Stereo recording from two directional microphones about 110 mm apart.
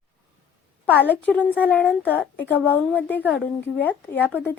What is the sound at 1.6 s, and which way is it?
A woman's voice, 15° left (ahead or behind).